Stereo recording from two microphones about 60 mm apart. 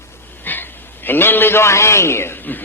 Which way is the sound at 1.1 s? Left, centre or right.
Left.